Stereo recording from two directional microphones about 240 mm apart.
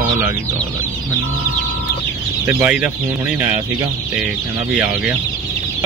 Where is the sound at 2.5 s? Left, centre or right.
Centre.